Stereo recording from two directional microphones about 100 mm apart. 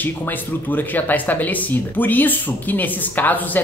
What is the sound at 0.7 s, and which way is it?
Speech, 20° left (ahead or behind).